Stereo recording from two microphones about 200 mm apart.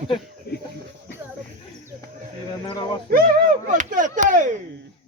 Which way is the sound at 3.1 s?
45° right (ahead or behind).